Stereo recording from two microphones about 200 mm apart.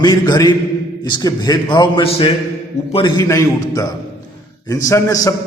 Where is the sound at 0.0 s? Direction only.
20° left (ahead or behind); by 2.9 s 35° left (ahead or behind).